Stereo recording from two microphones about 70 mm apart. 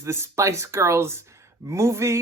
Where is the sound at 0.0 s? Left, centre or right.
Right.